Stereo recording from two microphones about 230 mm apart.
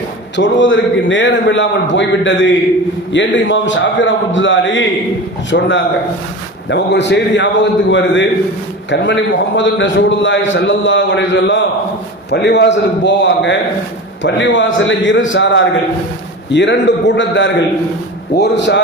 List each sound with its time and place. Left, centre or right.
0.3 s a man's voice: left